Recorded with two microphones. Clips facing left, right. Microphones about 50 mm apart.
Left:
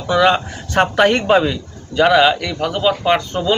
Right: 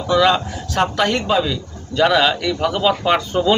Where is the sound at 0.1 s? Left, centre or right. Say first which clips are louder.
Left 1 dB; left.